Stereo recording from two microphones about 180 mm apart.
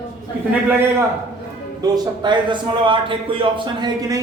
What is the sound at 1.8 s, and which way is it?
A man's voice, 25° right (ahead or behind).